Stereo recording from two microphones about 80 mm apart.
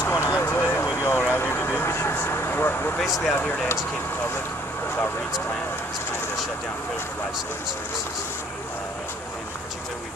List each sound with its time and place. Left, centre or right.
0.0 s vehicle: left
3.3 s speech: centre